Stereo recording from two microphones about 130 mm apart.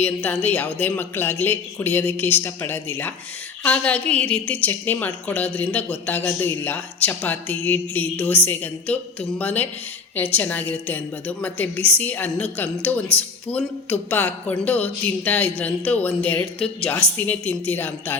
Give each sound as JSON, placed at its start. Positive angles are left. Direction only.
{"t": 0.0, "sound": "a woman's voice", "side_deg": 10}